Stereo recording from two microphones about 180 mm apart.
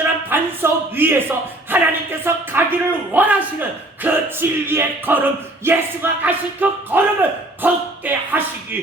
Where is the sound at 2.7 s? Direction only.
10° right (ahead or behind).